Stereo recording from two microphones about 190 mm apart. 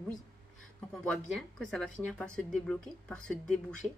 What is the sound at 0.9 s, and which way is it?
Speech, centre (ahead or behind).